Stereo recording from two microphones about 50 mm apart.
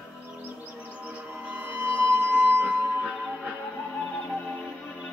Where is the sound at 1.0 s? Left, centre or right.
Right.